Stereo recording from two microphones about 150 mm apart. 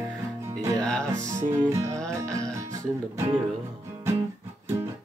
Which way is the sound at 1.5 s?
20° right (ahead or behind).